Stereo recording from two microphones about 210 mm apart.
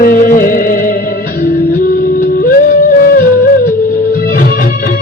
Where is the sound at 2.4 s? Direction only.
45° left (ahead or behind).